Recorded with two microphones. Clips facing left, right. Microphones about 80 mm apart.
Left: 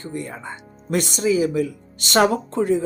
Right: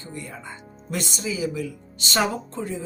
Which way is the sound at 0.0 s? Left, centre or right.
Left.